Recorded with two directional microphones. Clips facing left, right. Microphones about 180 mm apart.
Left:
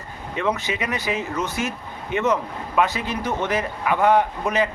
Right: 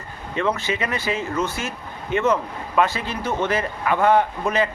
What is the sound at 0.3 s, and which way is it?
Speech, 15° left (ahead or behind).